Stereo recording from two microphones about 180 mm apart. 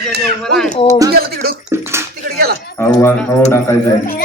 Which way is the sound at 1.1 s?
60° right (ahead or behind).